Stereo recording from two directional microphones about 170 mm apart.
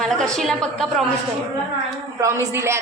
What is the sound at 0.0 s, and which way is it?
A woman's voice, centre (ahead or behind).